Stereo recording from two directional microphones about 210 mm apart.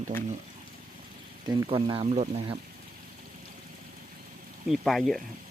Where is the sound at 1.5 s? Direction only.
20° right (ahead or behind).